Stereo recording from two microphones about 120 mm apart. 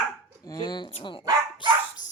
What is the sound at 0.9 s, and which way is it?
Speech, 45° left (ahead or behind).